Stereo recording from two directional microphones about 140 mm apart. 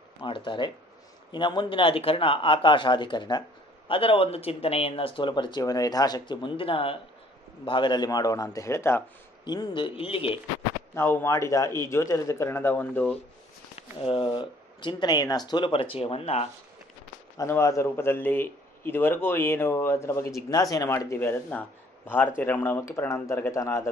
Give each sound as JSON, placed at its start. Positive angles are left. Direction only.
{"t": 0.2, "sound": "a man's voice", "side_deg": 35}
{"t": 9.4, "sound": "speech", "side_deg": 30}
{"t": 11.0, "sound": "a man's voice", "side_deg": 15}
{"t": 14.0, "sound": "speech", "side_deg": 35}
{"t": 17.4, "sound": "a man's voice", "side_deg": 20}